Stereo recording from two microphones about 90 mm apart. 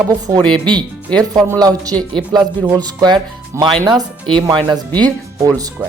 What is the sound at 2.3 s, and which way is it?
Speech, 50° right (ahead or behind).